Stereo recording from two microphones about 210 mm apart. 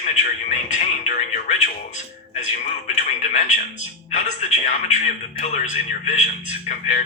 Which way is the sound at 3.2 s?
35° left (ahead or behind).